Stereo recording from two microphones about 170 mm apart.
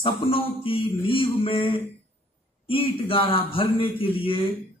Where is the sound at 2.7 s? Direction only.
30° left (ahead or behind).